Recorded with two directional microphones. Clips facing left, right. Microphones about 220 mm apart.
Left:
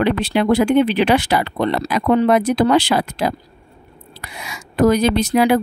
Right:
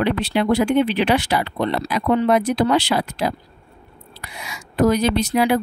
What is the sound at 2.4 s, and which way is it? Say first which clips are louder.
Speech: left 3 dB; 50° left (ahead or behind).